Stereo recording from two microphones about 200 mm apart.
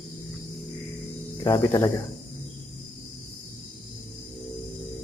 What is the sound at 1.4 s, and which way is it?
Speech, 15° left (ahead or behind).